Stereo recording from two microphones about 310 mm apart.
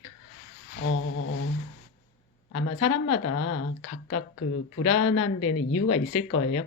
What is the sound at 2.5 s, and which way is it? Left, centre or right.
Speech, left.